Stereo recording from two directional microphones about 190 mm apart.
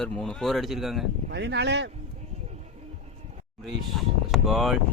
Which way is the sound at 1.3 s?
65° right (ahead or behind).